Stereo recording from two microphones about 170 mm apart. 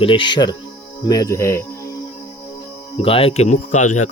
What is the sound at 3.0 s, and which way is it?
Speech, 35° left (ahead or behind).